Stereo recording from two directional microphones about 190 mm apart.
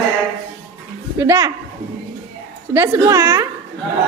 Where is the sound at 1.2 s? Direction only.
15° right (ahead or behind).